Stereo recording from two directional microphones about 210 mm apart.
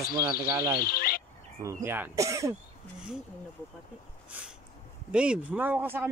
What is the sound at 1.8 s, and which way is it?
Speech, 10° right (ahead or behind).